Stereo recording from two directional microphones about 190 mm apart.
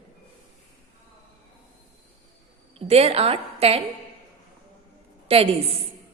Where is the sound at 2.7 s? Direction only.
30° right (ahead or behind).